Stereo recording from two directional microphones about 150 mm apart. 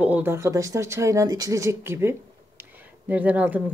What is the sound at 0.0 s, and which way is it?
Speech, 10° right (ahead or behind).